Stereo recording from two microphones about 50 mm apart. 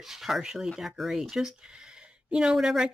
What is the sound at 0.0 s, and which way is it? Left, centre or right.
Speech, centre.